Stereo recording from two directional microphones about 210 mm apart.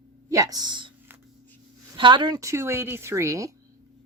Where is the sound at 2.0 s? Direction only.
20° right (ahead or behind).